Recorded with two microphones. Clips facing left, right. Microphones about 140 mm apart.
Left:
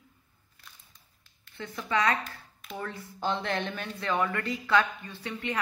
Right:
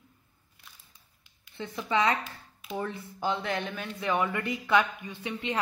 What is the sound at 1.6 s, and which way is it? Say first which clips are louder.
Speech: right 1 dB; 20° right (ahead or behind).